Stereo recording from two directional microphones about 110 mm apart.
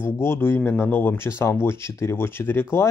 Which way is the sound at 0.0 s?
20° left (ahead or behind).